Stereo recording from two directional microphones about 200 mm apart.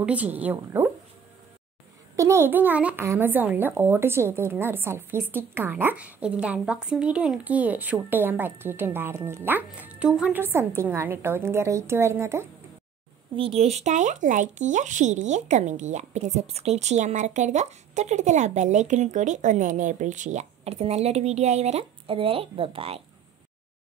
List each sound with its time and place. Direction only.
0.0 s speech: 5° right (ahead or behind)
2.1 s speech: 15° right (ahead or behind)
13.4 s speech: 30° right (ahead or behind)